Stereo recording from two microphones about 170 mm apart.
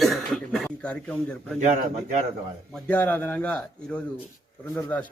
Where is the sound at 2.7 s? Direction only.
5° left (ahead or behind).